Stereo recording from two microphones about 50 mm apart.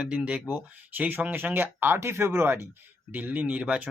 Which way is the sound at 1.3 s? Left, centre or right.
Right.